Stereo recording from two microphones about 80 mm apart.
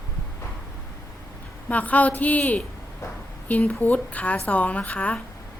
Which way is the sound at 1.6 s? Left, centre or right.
Centre.